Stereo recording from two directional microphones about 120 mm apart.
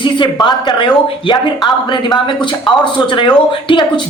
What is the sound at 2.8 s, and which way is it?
Speech, 40° left (ahead or behind).